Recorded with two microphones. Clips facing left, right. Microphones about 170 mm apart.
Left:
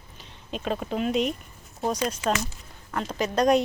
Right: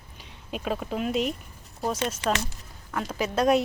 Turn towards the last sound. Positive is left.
turn(degrees=-5)  # may be behind; listen again after turning